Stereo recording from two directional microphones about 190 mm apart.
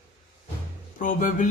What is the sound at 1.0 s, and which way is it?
Speech, 45° left (ahead or behind).